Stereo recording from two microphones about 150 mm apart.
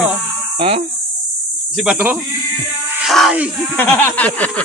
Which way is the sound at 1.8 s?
5° right (ahead or behind).